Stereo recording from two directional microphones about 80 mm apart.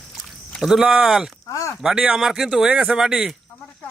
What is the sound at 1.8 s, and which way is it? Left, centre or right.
Speech, centre.